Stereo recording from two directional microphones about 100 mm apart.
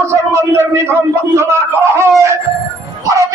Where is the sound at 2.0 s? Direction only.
30° right (ahead or behind).